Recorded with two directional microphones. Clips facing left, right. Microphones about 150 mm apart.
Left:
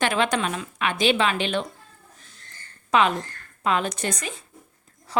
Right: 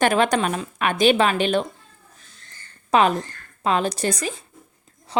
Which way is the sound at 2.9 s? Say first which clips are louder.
Right 3 dB; 35° right (ahead or behind).